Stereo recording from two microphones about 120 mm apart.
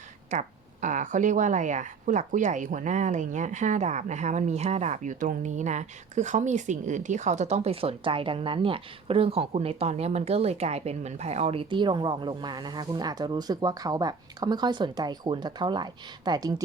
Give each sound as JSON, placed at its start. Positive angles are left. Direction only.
{"t": 0.3, "sound": "speech", "side_deg": -85}